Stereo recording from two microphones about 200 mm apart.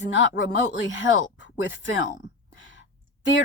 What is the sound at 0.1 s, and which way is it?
Speech, 65° left (ahead or behind).